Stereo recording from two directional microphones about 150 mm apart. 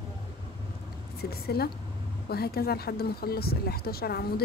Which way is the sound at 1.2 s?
90° left.